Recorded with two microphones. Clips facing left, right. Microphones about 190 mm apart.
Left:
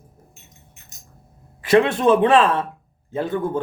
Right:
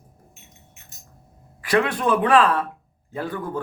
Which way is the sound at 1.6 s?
25° left (ahead or behind).